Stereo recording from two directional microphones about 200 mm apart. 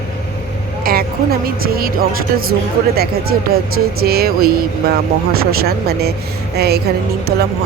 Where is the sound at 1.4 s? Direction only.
50° right (ahead or behind).